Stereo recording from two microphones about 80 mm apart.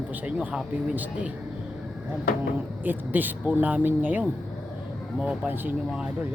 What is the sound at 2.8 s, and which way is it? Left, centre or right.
Speech, right.